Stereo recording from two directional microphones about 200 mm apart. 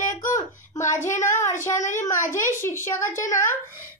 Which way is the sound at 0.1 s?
15° left (ahead or behind).